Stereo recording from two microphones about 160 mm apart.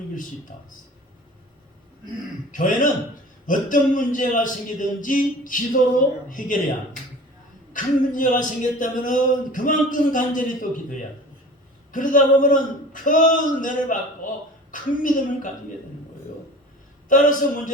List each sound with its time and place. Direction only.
2.5 s a man's voice: 55° left (ahead or behind)
7.7 s a man's voice: 55° left (ahead or behind)
11.9 s a man's voice: 55° left (ahead or behind)
17.1 s a man's voice: 55° left (ahead or behind)